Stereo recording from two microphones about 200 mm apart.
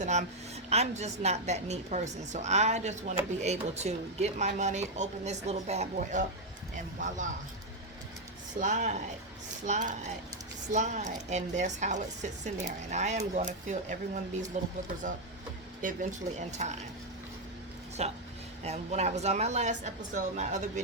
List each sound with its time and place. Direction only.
0.0 s a woman's voice: 35° right (ahead or behind)
8.5 s a woman's voice: 35° right (ahead or behind)
15.8 s a woman's voice: 40° right (ahead or behind)
18.0 s a woman's voice: 30° right (ahead or behind)